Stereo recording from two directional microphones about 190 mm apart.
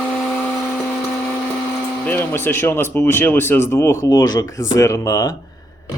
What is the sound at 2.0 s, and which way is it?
Speech, 10° left (ahead or behind).